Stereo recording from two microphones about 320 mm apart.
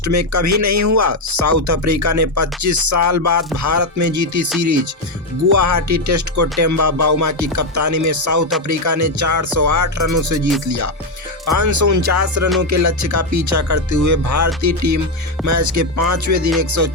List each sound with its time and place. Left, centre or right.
0.0 s speech: right
5.5 s speech: right